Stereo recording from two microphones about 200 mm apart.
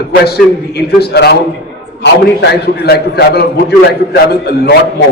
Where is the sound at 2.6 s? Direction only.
55° left (ahead or behind).